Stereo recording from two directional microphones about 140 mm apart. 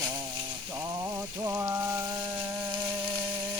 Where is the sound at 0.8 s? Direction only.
25° right (ahead or behind).